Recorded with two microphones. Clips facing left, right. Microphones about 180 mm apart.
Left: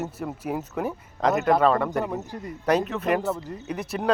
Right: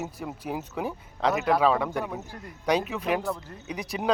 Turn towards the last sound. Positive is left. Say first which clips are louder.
# left 3 dB
turn(degrees=5)  # may be behind; listen again after turning